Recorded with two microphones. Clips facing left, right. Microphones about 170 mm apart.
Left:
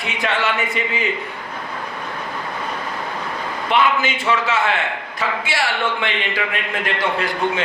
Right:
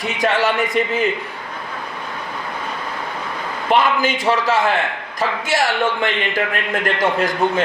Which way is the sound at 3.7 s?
40° right (ahead or behind).